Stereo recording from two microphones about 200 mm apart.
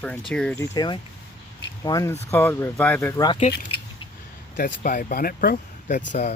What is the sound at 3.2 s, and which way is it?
Speech, 30° left (ahead or behind).